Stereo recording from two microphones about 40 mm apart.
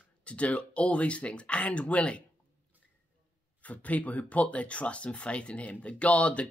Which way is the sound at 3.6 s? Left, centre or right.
Left.